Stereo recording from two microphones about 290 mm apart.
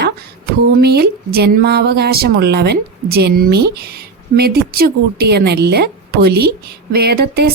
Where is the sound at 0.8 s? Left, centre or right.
Right.